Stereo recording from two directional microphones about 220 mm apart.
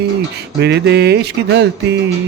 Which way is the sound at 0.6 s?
50° right (ahead or behind).